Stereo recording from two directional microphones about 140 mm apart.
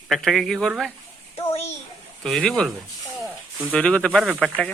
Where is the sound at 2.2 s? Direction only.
5° left (ahead or behind).